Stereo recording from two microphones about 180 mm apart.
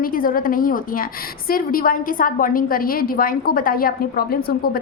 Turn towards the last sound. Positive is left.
turn(degrees=55)  # may be behind; listen again after turning